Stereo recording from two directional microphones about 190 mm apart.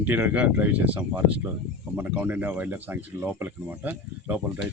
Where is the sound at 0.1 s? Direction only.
10° right (ahead or behind).